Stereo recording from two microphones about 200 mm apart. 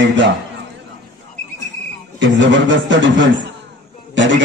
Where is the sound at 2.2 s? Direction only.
65° right (ahead or behind).